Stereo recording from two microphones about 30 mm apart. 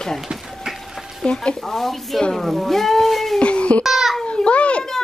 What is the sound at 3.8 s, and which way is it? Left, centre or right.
Speech, centre.